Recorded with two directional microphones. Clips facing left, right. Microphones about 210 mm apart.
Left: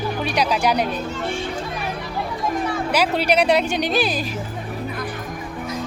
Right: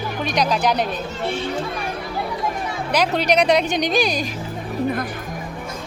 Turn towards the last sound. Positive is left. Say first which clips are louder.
# right 1 dB
turn(degrees=5)  # may be behind; listen again after turning